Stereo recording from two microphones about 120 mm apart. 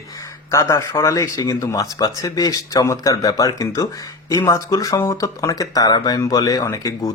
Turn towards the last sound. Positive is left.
turn(degrees=30)  # may be behind; listen again after turning